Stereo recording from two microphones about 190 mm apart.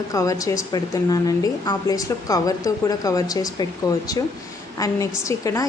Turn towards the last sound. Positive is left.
turn(degrees=15)  # may be behind; listen again after turning